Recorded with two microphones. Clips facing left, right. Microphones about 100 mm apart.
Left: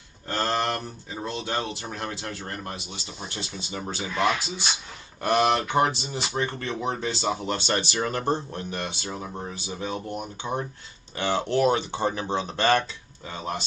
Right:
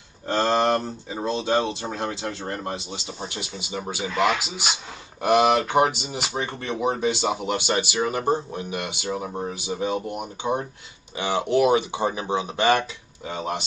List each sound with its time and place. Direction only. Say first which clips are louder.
0.3 s speech: right 6 dB; 20° right (ahead or behind)
2.9 s speech: right 5 dB; 35° right (ahead or behind)
3.3 s speech: right 2 dB; 15° right (ahead or behind)
5.2 s speech: right 4 dB; 15° right (ahead or behind)